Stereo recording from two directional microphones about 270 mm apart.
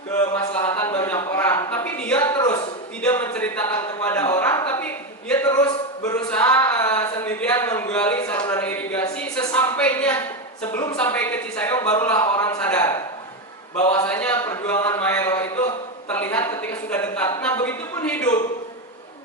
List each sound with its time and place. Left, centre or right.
0.3 s a sound: centre
13.7 s a man's voice: left
14.0 s a woman's voice: centre